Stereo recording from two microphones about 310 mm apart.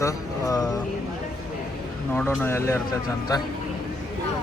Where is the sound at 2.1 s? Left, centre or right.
Centre.